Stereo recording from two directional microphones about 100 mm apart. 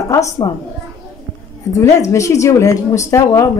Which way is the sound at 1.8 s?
30° left (ahead or behind).